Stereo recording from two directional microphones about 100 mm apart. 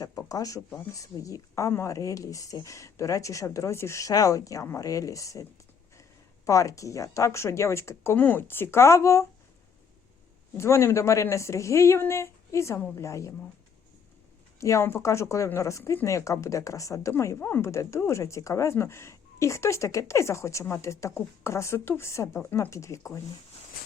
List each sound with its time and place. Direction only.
0.0 s a sound: 35° left (ahead or behind)
0.9 s speech: 35° left (ahead or behind)
10.6 s speech: 25° left (ahead or behind)
14.6 s speech: 30° left (ahead or behind)